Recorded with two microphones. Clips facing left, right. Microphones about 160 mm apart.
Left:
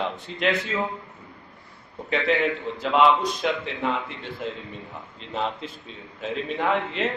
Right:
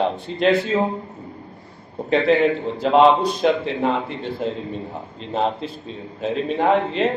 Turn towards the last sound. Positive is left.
turn(degrees=-30)  # may be behind; listen again after turning